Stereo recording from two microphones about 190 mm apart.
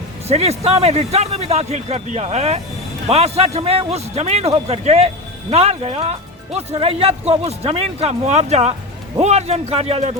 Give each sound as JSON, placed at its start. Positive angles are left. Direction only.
{"t": 0.3, "sound": "a man's voice", "side_deg": -35}